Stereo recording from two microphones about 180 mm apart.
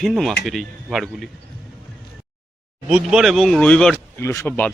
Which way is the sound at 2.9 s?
5° right (ahead or behind).